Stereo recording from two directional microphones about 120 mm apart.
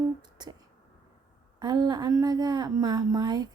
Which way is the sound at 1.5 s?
35° right (ahead or behind).